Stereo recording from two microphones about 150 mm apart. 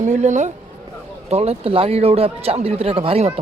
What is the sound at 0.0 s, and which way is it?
A woman's voice, 50° right (ahead or behind).